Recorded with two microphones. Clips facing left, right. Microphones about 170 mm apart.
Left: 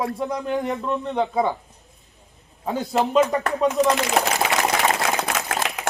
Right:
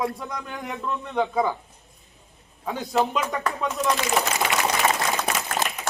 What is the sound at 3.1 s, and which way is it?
Speech, 35° left (ahead or behind).